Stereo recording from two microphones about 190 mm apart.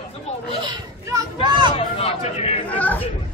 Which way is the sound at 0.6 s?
25° right (ahead or behind).